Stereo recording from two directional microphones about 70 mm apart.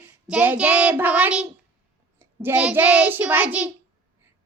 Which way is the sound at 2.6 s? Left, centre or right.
Right.